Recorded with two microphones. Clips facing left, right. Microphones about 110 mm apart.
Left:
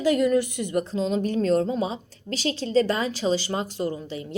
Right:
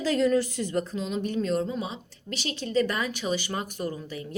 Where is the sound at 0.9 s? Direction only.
35° left (ahead or behind).